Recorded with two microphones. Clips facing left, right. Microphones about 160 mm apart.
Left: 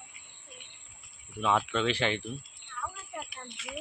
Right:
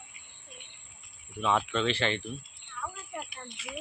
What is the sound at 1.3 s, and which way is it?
Speech, 5° left (ahead or behind).